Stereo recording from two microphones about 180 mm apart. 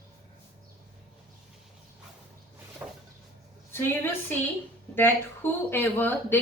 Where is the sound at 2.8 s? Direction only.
10° right (ahead or behind).